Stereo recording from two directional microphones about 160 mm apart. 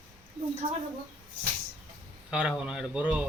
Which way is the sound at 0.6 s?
30° right (ahead or behind).